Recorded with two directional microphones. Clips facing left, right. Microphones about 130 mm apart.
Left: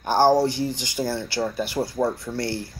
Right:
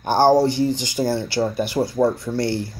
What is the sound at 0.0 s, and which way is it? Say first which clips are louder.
Speech: right 3 dB; 25° right (ahead or behind).